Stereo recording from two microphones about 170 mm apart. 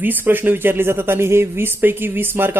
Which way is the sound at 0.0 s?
10° right (ahead or behind).